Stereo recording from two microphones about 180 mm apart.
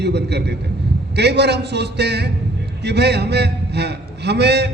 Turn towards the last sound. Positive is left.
turn(degrees=-70)  # may be behind; listen again after turning